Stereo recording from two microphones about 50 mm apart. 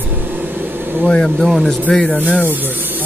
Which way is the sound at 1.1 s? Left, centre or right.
Centre.